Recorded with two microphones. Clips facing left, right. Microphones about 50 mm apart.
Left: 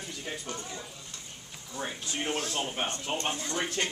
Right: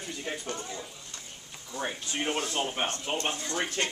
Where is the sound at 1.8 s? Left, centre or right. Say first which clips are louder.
Right 2 dB; centre.